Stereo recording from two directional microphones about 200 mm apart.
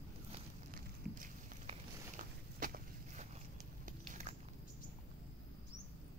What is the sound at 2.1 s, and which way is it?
Walk, 40° right (ahead or behind).